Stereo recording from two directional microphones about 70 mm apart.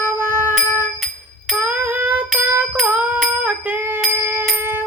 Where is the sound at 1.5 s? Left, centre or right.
Right.